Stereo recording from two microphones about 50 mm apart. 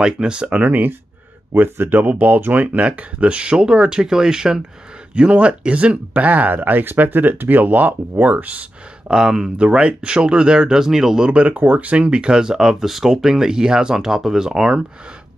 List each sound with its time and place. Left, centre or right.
0.0 s speech: centre
0.6 s speech: right
9.1 s speech: centre